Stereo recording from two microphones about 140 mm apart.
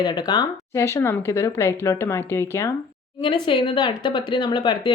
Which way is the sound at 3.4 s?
35° left (ahead or behind).